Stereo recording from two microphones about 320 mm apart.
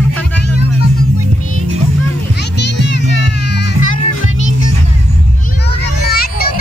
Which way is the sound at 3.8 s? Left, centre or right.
Left.